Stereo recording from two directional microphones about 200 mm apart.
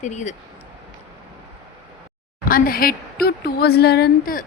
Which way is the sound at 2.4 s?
45° left (ahead or behind).